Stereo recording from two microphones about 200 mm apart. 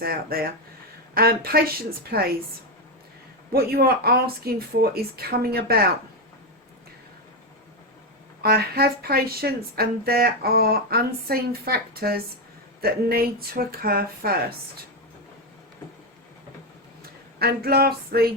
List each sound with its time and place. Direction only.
0.0 s a woman's voice: 50° right (ahead or behind)
3.5 s a woman's voice: 50° right (ahead or behind)
8.4 s a woman's voice: 50° right (ahead or behind)
17.4 s a woman's voice: 50° right (ahead or behind)